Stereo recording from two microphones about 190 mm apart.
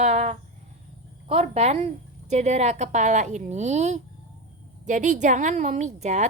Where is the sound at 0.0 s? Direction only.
40° right (ahead or behind).